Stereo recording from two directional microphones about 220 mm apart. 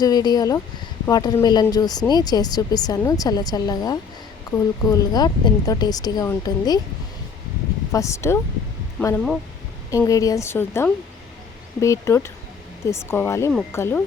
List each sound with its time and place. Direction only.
0.0 s speech: 20° left (ahead or behind)
7.9 s speech: 15° left (ahead or behind)